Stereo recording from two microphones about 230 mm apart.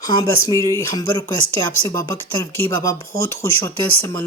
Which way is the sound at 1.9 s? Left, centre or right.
Centre.